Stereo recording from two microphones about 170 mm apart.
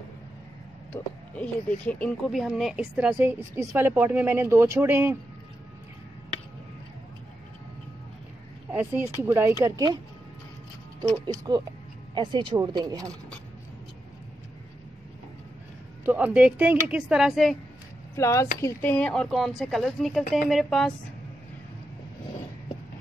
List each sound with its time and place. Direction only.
1.3 s speech: 5° left (ahead or behind); by 5.1 s 15° right (ahead or behind)
9.2 s speech: 15° right (ahead or behind)
11.0 s speech: 25° right (ahead or behind)
16.1 s speech: 10° right (ahead or behind)
18.1 s speech: 15° left (ahead or behind); by 20.9 s centre (ahead or behind)